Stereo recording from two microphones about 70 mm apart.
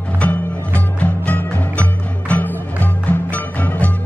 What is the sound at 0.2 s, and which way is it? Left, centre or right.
Music, left.